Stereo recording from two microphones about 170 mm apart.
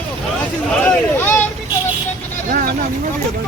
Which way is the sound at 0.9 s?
10° left (ahead or behind).